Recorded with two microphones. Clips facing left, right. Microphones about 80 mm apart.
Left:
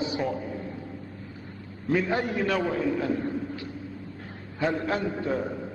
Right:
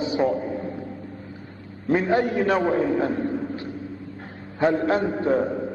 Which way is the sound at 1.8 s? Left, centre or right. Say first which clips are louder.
Right 5 dB; right.